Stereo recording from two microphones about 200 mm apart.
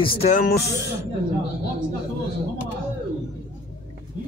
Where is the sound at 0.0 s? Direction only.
30° left (ahead or behind).